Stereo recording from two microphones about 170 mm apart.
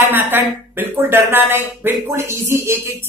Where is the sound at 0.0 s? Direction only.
10° right (ahead or behind).